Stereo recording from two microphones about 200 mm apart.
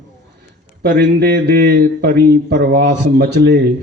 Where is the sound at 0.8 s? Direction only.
50° right (ahead or behind).